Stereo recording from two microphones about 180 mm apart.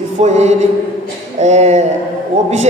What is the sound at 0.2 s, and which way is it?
A man's voice, 40° right (ahead or behind).